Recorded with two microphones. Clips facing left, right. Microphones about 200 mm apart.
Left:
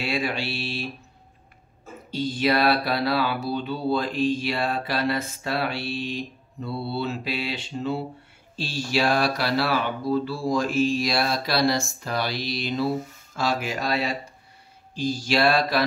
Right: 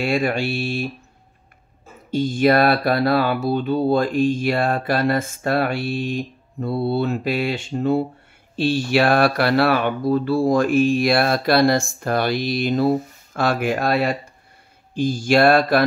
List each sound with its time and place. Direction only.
0.0 s speech: 50° right (ahead or behind)
2.0 s speech: 50° right (ahead or behind)